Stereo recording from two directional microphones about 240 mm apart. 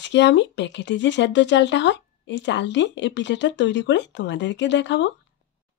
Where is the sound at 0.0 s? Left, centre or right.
Left.